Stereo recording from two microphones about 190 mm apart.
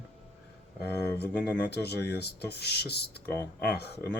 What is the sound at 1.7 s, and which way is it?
Speech, 60° left (ahead or behind).